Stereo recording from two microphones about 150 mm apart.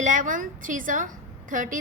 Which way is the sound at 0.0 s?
60° right (ahead or behind).